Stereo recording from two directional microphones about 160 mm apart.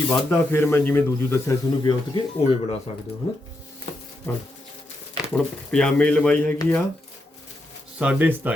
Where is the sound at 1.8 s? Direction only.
35° left (ahead or behind).